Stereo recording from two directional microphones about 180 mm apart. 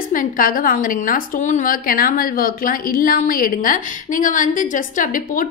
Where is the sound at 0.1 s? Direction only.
50° left (ahead or behind).